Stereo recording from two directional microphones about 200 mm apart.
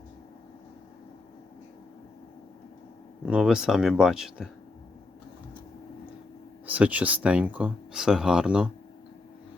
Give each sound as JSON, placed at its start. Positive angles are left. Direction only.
{"t": 3.2, "sound": "speech", "side_deg": -5}
{"t": 6.7, "sound": "speech", "side_deg": -5}